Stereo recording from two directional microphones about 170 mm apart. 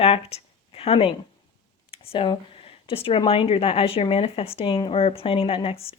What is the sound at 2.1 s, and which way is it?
Speech, 30° left (ahead or behind).